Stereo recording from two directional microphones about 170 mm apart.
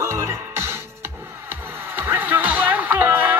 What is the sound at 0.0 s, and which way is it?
Music, 15° right (ahead or behind).